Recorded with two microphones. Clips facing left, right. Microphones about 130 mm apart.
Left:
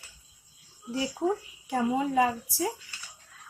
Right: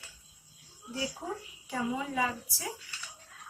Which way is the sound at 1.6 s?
50° left (ahead or behind).